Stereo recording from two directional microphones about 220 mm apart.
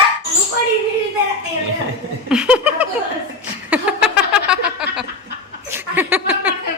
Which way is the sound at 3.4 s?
5° right (ahead or behind).